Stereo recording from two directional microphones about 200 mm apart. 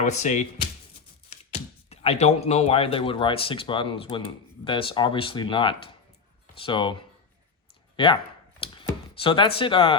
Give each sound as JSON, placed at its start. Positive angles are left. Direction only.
{"t": 0.0, "sound": "speech", "side_deg": 35}